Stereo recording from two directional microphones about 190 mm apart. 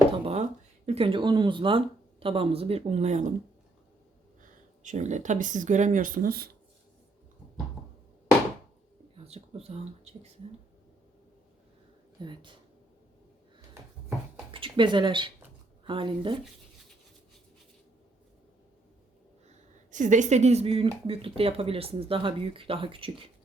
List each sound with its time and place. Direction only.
0.1 s a sound: 30° right (ahead or behind)
0.9 s speech: 30° right (ahead or behind)
4.8 s speech: 40° right (ahead or behind)
9.1 s a sound: 30° right (ahead or behind)
9.6 s speech: 35° right (ahead or behind)
12.2 s speech: 25° right (ahead or behind)
14.5 s speech: 25° right (ahead or behind)
19.5 s speech: 40° right (ahead or behind)